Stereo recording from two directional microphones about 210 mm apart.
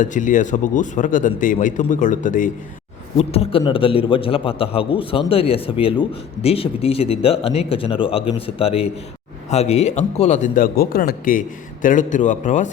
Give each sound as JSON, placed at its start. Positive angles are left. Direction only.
{"t": 0.0, "sound": "speech", "side_deg": 35}